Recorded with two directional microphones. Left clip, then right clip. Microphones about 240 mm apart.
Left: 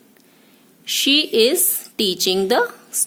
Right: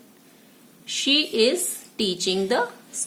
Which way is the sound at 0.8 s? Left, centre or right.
Left.